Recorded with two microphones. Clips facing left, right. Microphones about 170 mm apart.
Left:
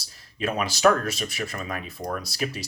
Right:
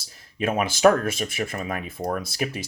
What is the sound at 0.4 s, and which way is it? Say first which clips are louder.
Speech: right 3 dB; 50° right (ahead or behind).